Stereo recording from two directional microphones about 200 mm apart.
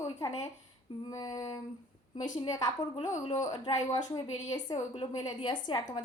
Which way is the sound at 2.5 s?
15° left (ahead or behind).